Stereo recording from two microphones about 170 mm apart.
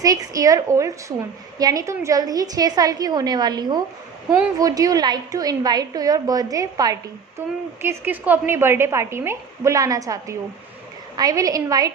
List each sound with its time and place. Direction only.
0.0 s a woman's voice: 20° right (ahead or behind)